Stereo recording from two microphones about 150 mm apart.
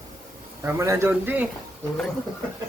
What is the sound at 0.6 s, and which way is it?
Speech, 20° right (ahead or behind).